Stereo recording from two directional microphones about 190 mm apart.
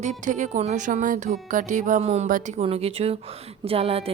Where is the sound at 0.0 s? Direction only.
40° right (ahead or behind).